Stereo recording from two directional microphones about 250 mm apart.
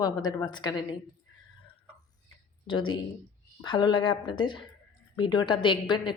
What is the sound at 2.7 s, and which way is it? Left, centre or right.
A woman's voice, centre.